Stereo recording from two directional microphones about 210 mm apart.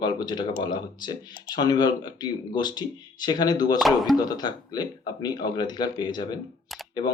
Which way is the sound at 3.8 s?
Centre (ahead or behind).